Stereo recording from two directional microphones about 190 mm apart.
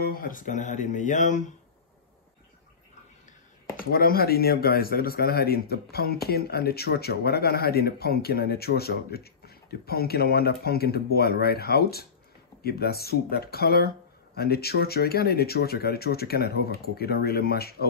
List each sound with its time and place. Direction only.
0.0 s speech: 50° left (ahead or behind)
3.7 s speech: 50° left (ahead or behind)